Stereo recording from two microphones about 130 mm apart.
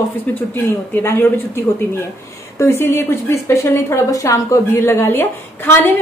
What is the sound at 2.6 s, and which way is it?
A woman's voice, 20° left (ahead or behind).